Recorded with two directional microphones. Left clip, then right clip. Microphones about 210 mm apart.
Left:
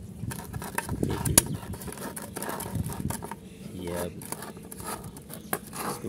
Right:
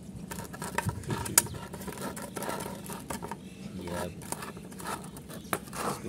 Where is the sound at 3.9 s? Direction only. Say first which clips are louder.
Left 3 dB; 5° left (ahead or behind).